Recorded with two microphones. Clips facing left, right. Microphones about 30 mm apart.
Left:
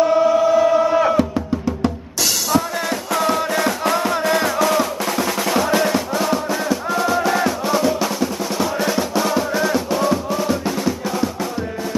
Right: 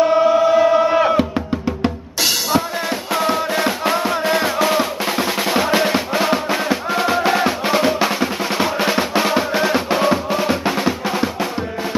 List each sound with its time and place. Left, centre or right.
0.0 s chant: right
3.1 s music: centre; by 11.2 s right